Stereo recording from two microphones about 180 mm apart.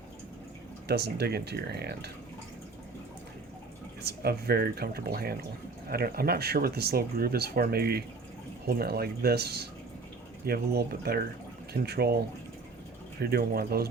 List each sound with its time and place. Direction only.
0.9 s speech: 65° right (ahead or behind)
4.0 s speech: 60° right (ahead or behind)